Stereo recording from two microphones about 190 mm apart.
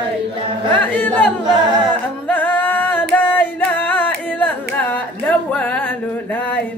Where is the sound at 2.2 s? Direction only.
10° left (ahead or behind).